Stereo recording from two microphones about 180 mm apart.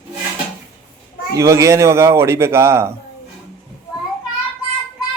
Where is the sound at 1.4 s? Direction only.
15° right (ahead or behind).